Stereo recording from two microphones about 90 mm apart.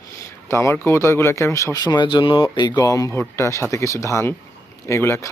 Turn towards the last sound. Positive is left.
turn(degrees=30)  # may be behind; listen again after turning